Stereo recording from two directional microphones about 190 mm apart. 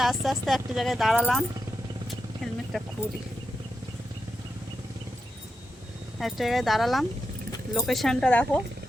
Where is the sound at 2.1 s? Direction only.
Centre (ahead or behind).